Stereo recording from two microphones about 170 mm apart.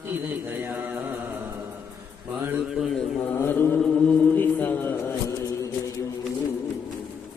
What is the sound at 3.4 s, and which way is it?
A man's voice, 10° left (ahead or behind).